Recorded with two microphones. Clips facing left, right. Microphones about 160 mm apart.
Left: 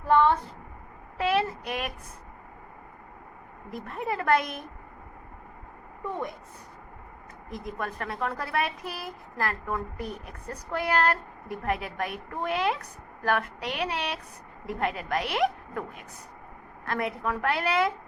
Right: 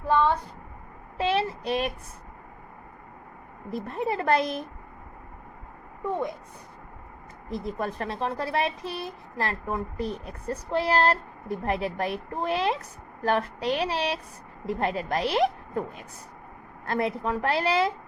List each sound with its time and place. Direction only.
1.2 s speech: 30° right (ahead or behind)
3.7 s speech: 30° right (ahead or behind)
7.5 s a woman's voice: 30° right (ahead or behind)